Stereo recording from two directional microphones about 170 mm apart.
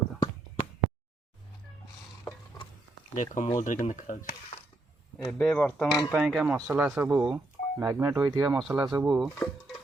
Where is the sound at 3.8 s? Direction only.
50° left (ahead or behind).